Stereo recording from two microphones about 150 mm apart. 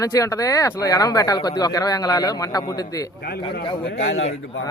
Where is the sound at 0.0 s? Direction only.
20° left (ahead or behind).